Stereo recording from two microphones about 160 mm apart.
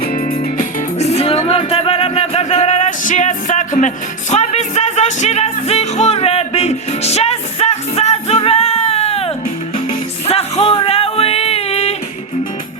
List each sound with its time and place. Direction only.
0.0 s music: 70° left (ahead or behind)
0.9 s music: 40° left (ahead or behind)